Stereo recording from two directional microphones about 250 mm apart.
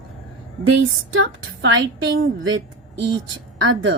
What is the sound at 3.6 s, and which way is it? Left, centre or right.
Speech, right.